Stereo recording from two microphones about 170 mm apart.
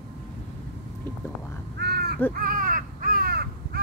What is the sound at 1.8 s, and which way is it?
Crow, 70° right (ahead or behind).